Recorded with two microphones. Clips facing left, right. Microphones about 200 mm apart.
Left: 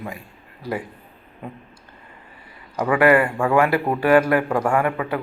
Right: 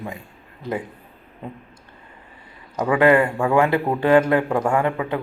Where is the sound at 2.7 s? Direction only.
20° right (ahead or behind).